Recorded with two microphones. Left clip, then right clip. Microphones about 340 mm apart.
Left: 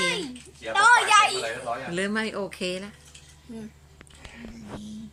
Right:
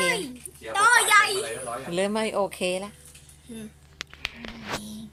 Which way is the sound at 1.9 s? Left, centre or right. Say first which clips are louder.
Right 6 dB; centre.